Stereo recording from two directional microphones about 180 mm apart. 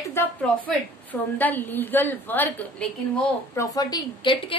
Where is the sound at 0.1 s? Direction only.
10° left (ahead or behind).